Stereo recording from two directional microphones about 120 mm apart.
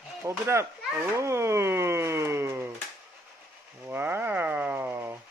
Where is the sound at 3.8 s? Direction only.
15° right (ahead or behind).